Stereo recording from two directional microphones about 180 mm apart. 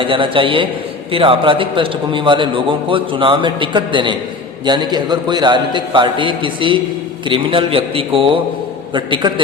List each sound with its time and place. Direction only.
0.0 s a man's voice: 30° right (ahead or behind)